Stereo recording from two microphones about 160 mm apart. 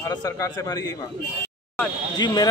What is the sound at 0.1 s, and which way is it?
Speech, 20° left (ahead or behind).